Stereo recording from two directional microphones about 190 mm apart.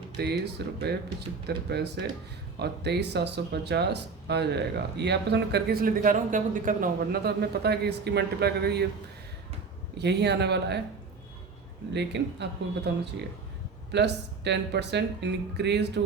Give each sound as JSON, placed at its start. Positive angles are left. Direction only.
{"t": 0.2, "sound": "speech", "side_deg": -60}
{"t": 10.0, "sound": "speech", "side_deg": -60}
{"t": 11.9, "sound": "speech", "side_deg": -65}
{"t": 13.9, "sound": "speech", "side_deg": -65}